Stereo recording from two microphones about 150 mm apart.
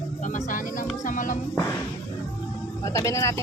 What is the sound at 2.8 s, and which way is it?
Speech, 20° left (ahead or behind).